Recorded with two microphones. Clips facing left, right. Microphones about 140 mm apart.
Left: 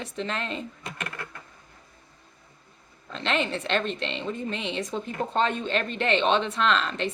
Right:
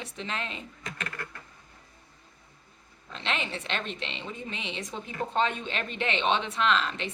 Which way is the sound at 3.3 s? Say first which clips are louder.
Left 7 dB; 50° left (ahead or behind).